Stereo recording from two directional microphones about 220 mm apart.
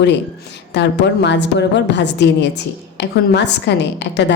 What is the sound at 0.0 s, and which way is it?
A woman's voice, 50° left (ahead or behind).